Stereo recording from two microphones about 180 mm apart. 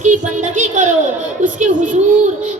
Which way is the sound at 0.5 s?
40° right (ahead or behind).